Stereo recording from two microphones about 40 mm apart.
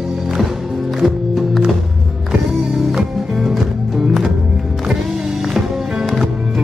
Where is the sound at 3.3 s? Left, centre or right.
Centre.